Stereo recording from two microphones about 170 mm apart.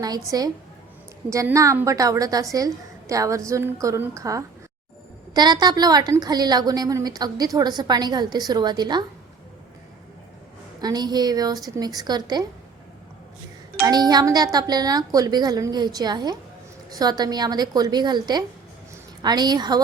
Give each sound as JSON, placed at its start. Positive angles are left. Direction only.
{"t": 0.0, "sound": "a woman's voice", "side_deg": -20}
{"t": 10.8, "sound": "a woman's voice", "side_deg": -25}
{"t": 13.8, "sound": "a woman's voice", "side_deg": -25}